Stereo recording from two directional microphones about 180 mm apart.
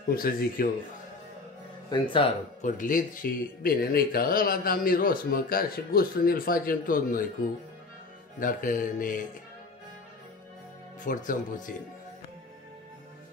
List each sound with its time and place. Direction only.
0.1 s speech: 55° left (ahead or behind)
1.9 s speech: 30° left (ahead or behind)
2.6 s speech: 50° left (ahead or behind)
8.4 s speech: 50° left (ahead or behind)
11.1 s speech: 45° left (ahead or behind)